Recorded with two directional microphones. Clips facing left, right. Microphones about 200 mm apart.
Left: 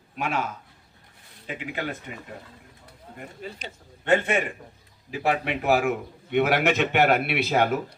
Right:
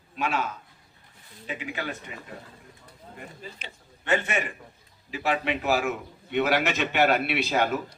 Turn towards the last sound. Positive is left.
turn(degrees=55)  # may be behind; listen again after turning